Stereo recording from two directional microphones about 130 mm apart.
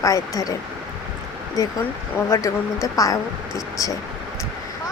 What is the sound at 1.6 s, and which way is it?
Speech, 25° left (ahead or behind).